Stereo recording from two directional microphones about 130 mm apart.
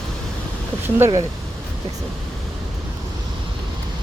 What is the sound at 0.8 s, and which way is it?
Speech, 20° right (ahead or behind).